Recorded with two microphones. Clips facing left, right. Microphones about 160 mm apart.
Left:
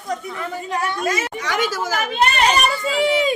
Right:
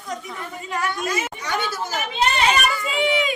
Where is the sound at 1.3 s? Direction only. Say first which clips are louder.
Left 4 dB; 90° left; by 2.4 s 75° left (ahead or behind).